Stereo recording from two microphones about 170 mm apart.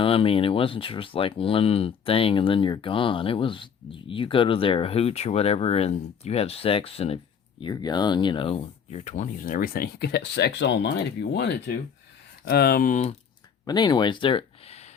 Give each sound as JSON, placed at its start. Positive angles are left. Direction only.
{"t": 0.0, "sound": "speech", "side_deg": 35}
{"t": 7.6, "sound": "speech", "side_deg": 25}
{"t": 12.5, "sound": "speech", "side_deg": 65}
{"t": 13.7, "sound": "speech", "side_deg": 25}